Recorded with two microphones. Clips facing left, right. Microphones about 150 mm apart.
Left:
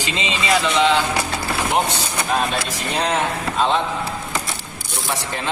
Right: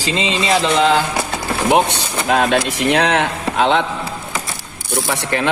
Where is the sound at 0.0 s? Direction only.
30° right (ahead or behind).